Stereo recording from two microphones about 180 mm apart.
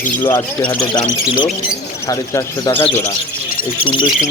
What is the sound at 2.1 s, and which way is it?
Speech, 20° left (ahead or behind).